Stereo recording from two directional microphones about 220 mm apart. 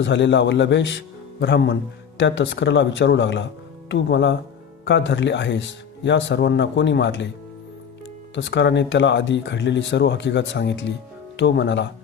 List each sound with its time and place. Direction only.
0.0 s speech: 55° left (ahead or behind)
8.4 s speech: 55° left (ahead or behind)